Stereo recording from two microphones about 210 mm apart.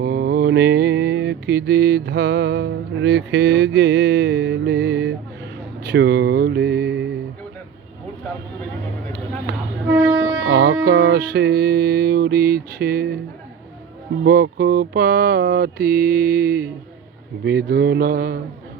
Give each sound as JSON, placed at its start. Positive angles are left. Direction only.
{"t": 0.0, "sound": "mantra", "side_deg": -50}
{"t": 10.4, "sound": "music", "side_deg": -50}
{"t": 14.3, "sound": "mantra", "side_deg": -50}